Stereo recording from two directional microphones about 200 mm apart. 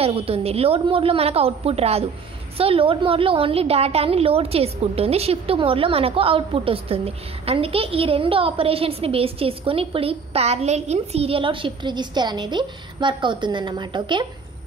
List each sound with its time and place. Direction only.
0.0 s a woman's voice: 30° right (ahead or behind)